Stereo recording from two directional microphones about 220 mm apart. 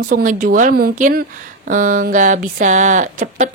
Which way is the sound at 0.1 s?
35° right (ahead or behind).